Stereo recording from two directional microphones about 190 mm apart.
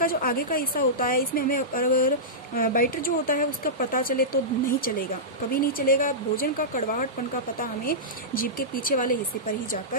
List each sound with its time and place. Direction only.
0.0 s a woman's voice: 50° left (ahead or behind)